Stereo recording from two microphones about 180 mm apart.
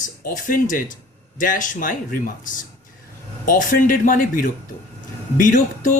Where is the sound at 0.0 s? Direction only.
50° left (ahead or behind).